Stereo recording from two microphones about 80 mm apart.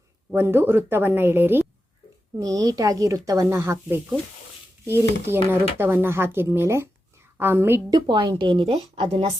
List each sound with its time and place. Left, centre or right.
0.3 s speech: right
2.4 s speech: right
3.6 s speech: right
7.9 s speech: right